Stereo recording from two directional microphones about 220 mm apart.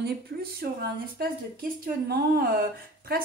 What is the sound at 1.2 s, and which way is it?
Speech, 45° right (ahead or behind).